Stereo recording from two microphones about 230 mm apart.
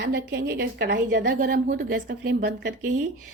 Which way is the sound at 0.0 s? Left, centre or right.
Right.